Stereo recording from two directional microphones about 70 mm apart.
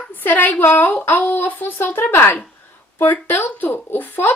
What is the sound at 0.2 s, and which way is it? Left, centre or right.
A woman's voice, left.